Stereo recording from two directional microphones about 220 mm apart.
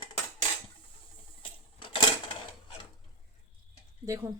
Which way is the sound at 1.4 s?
25° left (ahead or behind).